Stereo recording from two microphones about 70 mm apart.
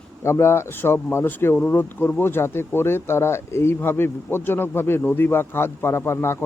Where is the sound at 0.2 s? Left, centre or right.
Left.